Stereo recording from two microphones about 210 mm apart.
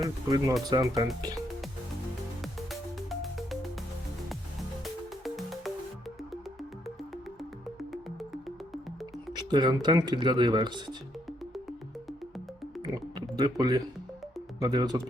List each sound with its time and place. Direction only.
0.0 s speech: 20° right (ahead or behind)
2.4 s music: centre (ahead or behind)
4.8 s music: centre (ahead or behind)
9.3 s speech: 20° right (ahead or behind)
13.3 s speech: 20° right (ahead or behind)